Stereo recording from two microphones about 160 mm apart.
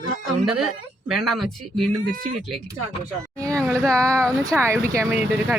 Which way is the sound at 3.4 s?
20° right (ahead or behind).